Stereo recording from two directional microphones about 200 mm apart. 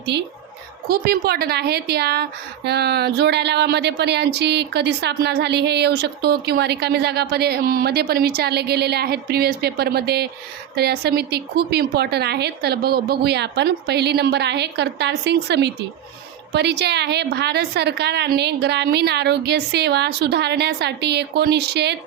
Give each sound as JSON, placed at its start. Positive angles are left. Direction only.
{"t": 0.9, "sound": "a woman's voice", "side_deg": -50}